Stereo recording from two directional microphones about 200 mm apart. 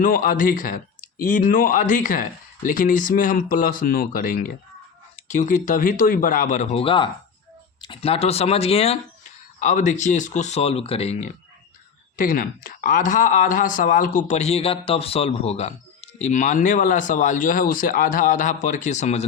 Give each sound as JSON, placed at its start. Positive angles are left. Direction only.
{"t": 0.0, "sound": "speech", "side_deg": 45}
{"t": 12.1, "sound": "speech", "side_deg": 45}